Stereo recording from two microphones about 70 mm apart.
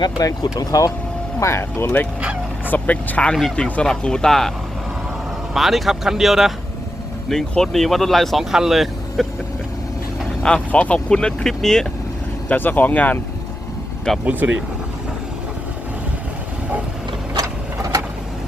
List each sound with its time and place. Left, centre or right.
0.0 s speech: left
1.4 s speech: left
2.6 s speech: left; by 4.5 s centre
5.5 s speech: centre
7.3 s speech: centre
10.4 s speech: centre
12.5 s speech: left
14.3 s speech: right
17.3 s a sound: right